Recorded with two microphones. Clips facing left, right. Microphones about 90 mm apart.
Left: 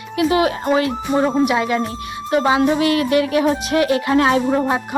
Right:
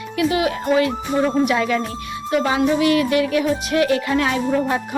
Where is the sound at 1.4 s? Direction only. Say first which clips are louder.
Left 1 dB; 20° left (ahead or behind); by 3.6 s 40° left (ahead or behind).